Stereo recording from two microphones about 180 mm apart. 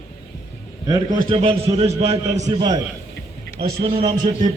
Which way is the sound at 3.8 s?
25° right (ahead or behind).